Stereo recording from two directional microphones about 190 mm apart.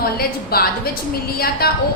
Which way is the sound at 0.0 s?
55° left (ahead or behind).